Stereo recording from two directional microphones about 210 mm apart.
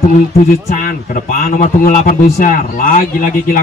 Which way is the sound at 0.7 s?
40° left (ahead or behind).